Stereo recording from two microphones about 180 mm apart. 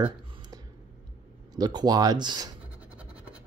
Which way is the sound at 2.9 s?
5° right (ahead or behind).